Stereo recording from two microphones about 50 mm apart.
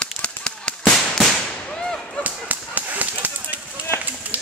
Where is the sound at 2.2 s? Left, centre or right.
Right.